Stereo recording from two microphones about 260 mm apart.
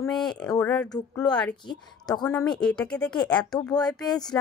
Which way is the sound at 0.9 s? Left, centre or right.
Centre.